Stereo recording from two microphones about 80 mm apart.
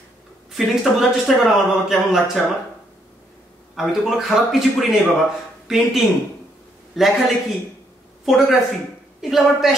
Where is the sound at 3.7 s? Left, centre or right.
Centre.